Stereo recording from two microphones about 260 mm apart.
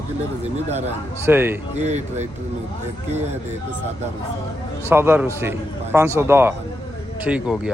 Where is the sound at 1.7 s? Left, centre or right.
Right.